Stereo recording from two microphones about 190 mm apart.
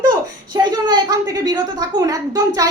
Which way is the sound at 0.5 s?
20° right (ahead or behind).